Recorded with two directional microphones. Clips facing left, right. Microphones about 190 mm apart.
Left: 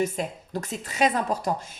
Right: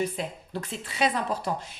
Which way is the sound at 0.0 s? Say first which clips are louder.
Left 3 dB; 45° left (ahead or behind).